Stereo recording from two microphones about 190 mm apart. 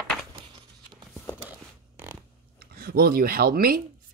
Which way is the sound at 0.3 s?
25° right (ahead or behind).